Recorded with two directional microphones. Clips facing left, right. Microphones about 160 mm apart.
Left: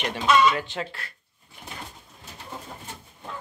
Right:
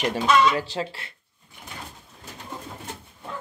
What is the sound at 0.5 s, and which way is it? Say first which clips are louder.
Speech: right 1 dB; 25° right (ahead or behind).